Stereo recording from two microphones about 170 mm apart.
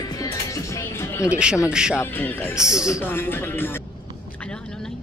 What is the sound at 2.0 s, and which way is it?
Speech, 10° left (ahead or behind).